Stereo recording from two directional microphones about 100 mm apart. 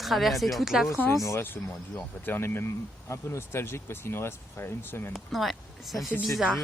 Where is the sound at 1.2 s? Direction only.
25° left (ahead or behind).